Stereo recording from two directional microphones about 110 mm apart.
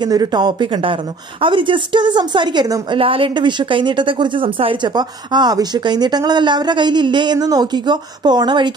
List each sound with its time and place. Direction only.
0.0 s a woman's voice: 40° right (ahead or behind)
3.0 s a woman's voice: 55° right (ahead or behind)
4.9 s speech: 40° right (ahead or behind)